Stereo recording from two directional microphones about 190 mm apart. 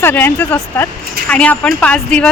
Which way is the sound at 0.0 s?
10° left (ahead or behind).